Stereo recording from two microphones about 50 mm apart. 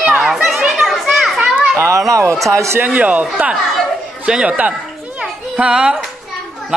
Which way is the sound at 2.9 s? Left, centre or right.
Right.